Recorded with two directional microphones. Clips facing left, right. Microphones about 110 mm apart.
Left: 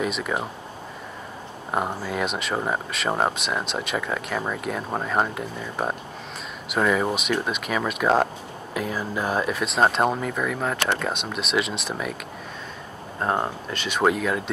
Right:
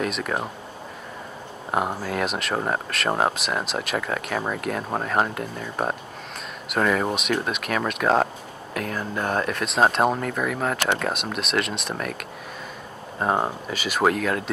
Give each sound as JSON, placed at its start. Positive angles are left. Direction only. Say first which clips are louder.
{"t": 0.0, "sound": "speech", "louder": "even", "side_deg": 0}
{"t": 1.7, "sound": "speech", "louder": "right 1 dB", "side_deg": 0}